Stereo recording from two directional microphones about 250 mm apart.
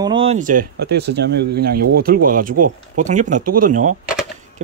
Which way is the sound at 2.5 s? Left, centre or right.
Right.